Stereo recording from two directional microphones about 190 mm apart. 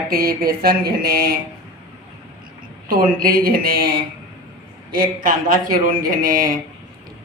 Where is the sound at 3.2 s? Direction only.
50° right (ahead or behind).